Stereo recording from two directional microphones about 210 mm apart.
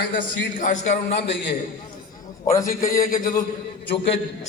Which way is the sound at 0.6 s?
35° left (ahead or behind).